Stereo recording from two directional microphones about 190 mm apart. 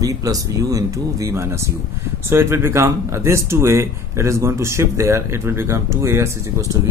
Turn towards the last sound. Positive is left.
turn(degrees=-15)  # may be behind; listen again after turning